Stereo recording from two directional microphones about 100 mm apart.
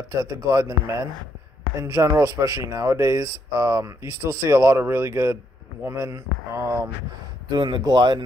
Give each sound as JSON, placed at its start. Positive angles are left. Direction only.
{"t": 0.1, "sound": "speech", "side_deg": -35}
{"t": 7.4, "sound": "speech", "side_deg": -45}